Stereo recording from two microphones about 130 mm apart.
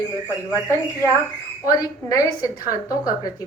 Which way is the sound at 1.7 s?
25° left (ahead or behind).